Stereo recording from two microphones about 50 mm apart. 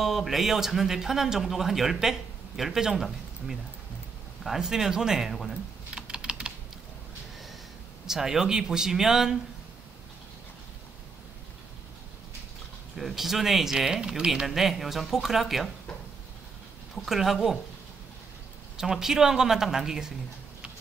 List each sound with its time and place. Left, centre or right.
0.0 s speech: centre
5.3 s speech: centre
5.9 s typing: right
8.1 s speech: centre
12.9 s speech: centre
17.1 s speech: centre
18.8 s speech: centre